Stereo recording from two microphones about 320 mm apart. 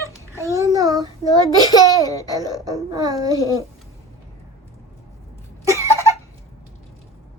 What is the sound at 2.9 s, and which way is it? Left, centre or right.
Babbling, centre.